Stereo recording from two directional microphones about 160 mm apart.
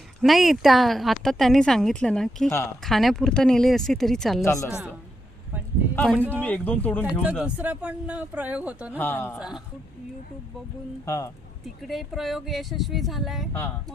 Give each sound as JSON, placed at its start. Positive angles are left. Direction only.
{"t": 0.2, "sound": "speech", "side_deg": 0}
{"t": 4.4, "sound": "speech", "side_deg": 20}
{"t": 6.1, "sound": "speech", "side_deg": -10}
{"t": 6.4, "sound": "speech", "side_deg": 10}
{"t": 7.0, "sound": "speech", "side_deg": -10}
{"t": 9.0, "sound": "speech", "side_deg": 15}
{"t": 11.0, "sound": "speech", "side_deg": 20}
{"t": 11.6, "sound": "speech", "side_deg": 0}